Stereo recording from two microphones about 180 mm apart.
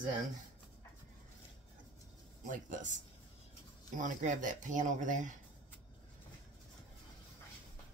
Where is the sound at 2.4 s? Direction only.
45° right (ahead or behind).